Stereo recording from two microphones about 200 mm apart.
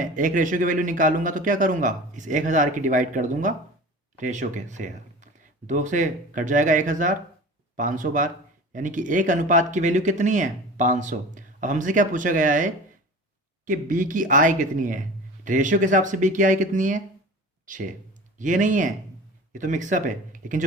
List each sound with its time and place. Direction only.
0.0 s speech: 40° right (ahead or behind)